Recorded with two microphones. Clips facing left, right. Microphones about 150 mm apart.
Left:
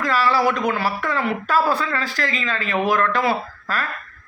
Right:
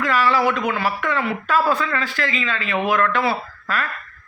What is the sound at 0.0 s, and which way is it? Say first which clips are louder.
A man's voice: even; 35° left (ahead or behind).